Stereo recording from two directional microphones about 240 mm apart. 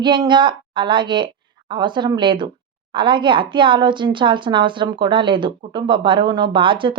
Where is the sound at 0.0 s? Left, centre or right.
Centre.